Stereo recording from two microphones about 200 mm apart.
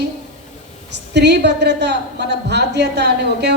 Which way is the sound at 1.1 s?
60° right (ahead or behind).